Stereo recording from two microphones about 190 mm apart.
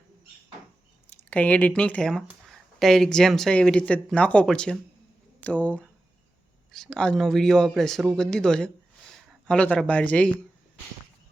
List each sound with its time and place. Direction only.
1.3 s a man's voice: 5° left (ahead or behind)